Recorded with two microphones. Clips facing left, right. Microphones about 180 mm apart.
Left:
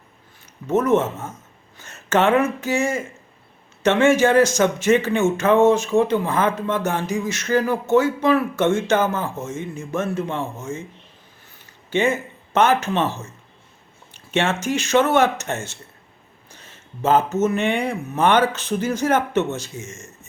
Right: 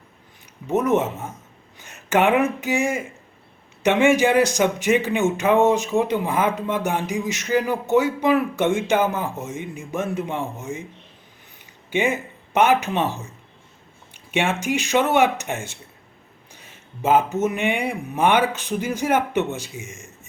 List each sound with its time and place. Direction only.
0.7 s speech: 15° right (ahead or behind)
11.9 s speech: 15° right (ahead or behind)